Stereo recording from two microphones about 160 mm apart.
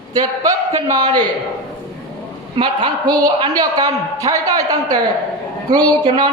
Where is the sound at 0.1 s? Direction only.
25° right (ahead or behind).